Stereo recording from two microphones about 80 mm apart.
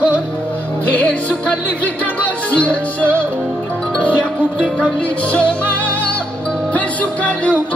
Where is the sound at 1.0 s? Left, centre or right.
Centre.